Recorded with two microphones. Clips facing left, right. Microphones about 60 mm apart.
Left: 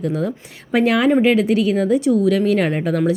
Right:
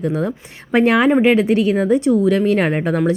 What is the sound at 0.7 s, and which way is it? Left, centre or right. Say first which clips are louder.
A woman's voice: right 2 dB; right.